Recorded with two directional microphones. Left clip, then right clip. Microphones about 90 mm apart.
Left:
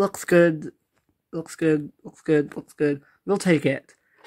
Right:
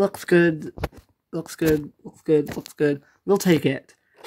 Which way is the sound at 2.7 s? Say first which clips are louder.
Right 2 dB; 40° right (ahead or behind).